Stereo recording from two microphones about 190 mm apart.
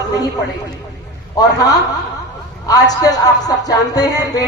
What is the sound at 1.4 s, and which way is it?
Speech, 20° left (ahead or behind).